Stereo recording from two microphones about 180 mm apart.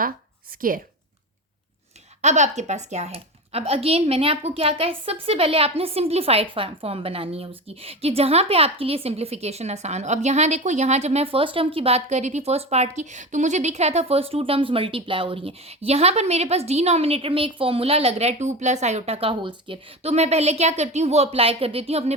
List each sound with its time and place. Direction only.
0.5 s a woman's voice: 50° right (ahead or behind)
2.2 s speech: 40° right (ahead or behind)